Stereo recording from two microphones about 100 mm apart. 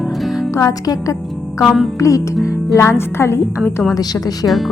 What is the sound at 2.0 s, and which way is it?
Speech, 35° left (ahead or behind).